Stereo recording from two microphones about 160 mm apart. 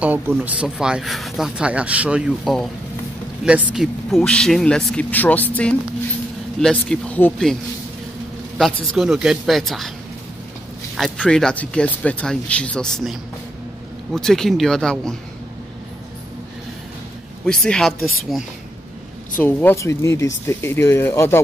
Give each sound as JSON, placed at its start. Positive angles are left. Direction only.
{"t": 0.0, "sound": "speech", "side_deg": -10}
{"t": 6.6, "sound": "speech", "side_deg": 5}
{"t": 8.5, "sound": "speech", "side_deg": 0}
{"t": 11.0, "sound": "speech", "side_deg": 5}
{"t": 17.5, "sound": "speech", "side_deg": 5}
{"t": 19.4, "sound": "speech", "side_deg": 15}